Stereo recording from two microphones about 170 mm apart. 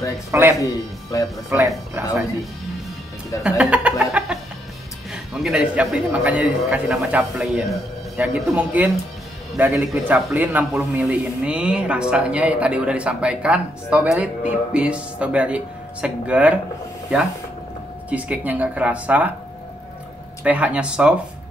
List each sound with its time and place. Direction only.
0.3 s speech: 15° right (ahead or behind)
1.1 s speech: 20° left (ahead or behind)
1.5 s speech: 10° right (ahead or behind)
3.4 s speech: 5° right (ahead or behind)
4.0 s chicken: 5° right (ahead or behind)
5.1 s a man's voice: 5° right (ahead or behind)
18.1 s speech: 10° right (ahead or behind)
20.4 s speech: 10° right (ahead or behind)